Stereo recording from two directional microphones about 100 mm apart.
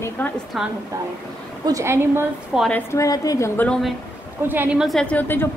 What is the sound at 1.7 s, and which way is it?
Speech, 30° right (ahead or behind).